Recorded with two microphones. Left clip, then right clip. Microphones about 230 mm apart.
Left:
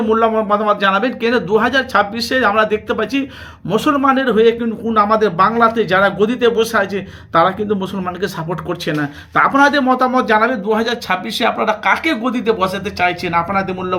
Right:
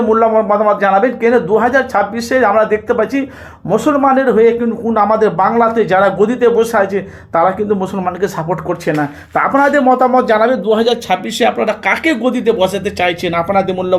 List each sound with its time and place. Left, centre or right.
0.1 s speech: centre
10.4 s speech: centre